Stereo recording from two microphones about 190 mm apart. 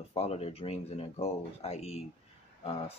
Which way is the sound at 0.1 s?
30° left (ahead or behind).